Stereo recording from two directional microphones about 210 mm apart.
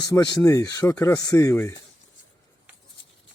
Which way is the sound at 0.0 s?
20° left (ahead or behind).